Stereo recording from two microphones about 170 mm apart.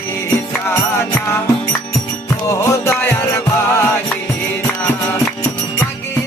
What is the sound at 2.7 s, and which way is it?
Music, 15° left (ahead or behind).